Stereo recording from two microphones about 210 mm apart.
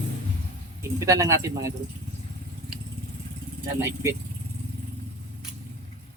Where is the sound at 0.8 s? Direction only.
15° right (ahead or behind).